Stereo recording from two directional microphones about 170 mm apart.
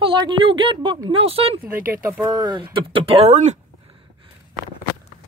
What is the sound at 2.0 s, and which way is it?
Speech, 10° right (ahead or behind).